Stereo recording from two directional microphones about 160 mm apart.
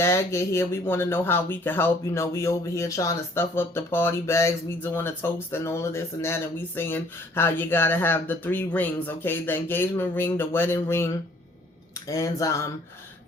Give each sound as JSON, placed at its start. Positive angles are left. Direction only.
{"t": 0.0, "sound": "speech", "side_deg": 15}